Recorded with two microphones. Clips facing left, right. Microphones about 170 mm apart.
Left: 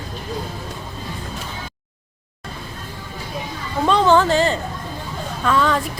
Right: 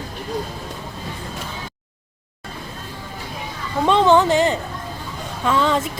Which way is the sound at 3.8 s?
20° right (ahead or behind).